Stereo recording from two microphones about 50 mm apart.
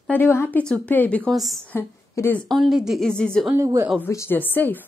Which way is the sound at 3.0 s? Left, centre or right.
Centre.